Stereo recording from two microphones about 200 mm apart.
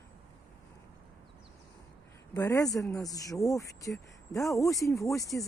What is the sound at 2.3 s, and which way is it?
Speech, 15° left (ahead or behind).